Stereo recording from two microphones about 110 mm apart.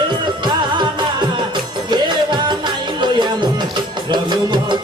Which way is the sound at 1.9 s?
45° right (ahead or behind).